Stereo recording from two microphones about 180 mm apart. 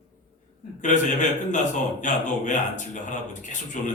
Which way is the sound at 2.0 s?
45° left (ahead or behind).